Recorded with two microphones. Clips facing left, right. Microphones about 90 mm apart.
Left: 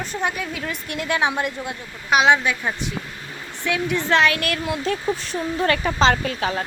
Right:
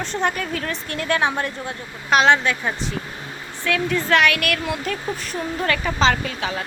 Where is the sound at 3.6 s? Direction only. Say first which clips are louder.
Right 1 dB; 20° left (ahead or behind); by 6.6 s 35° left (ahead or behind).